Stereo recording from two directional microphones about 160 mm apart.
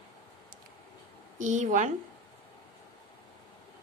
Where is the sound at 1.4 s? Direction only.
50° right (ahead or behind).